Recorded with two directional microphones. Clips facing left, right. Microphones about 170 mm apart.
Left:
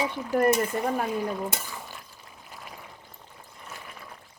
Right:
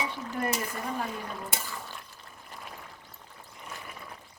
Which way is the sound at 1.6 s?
10° left (ahead or behind).